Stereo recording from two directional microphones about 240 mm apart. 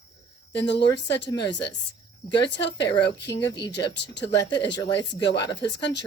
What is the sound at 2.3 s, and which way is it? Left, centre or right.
Speech, left.